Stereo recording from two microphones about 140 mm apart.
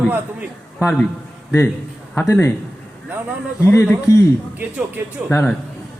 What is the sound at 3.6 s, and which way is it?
Speech, 15° left (ahead or behind).